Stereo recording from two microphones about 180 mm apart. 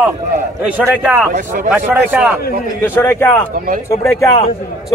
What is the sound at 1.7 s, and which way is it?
Speech, 10° right (ahead or behind).